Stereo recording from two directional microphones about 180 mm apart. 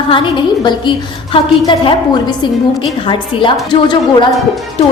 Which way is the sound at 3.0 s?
25° left (ahead or behind).